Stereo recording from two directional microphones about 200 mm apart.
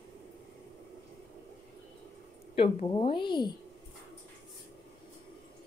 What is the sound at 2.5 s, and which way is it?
A woman's voice, 25° left (ahead or behind).